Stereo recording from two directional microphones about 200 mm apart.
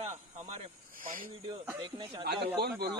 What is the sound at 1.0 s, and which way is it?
Speech, 45° right (ahead or behind).